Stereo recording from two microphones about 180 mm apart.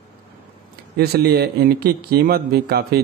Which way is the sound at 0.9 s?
60° right (ahead or behind).